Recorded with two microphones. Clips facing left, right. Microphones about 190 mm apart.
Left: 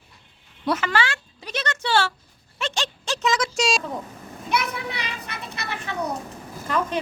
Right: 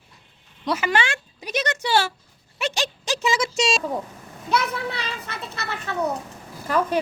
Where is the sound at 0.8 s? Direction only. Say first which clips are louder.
Right 1 dB; 15° right (ahead or behind).